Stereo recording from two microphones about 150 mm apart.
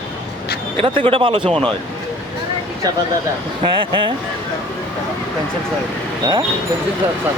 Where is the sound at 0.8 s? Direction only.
40° right (ahead or behind).